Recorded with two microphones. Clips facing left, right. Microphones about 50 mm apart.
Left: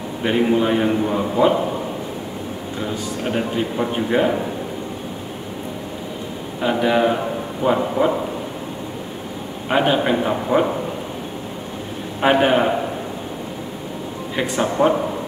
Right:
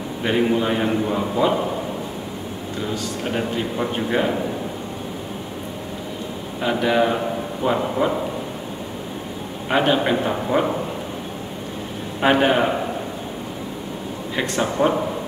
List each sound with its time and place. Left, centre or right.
0.2 s a man's voice: centre
3.3 s a man's voice: centre
6.6 s a man's voice: centre
9.7 s a man's voice: centre
12.2 s a man's voice: centre
14.3 s a man's voice: centre